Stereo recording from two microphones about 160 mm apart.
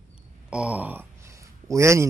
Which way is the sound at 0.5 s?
10° right (ahead or behind).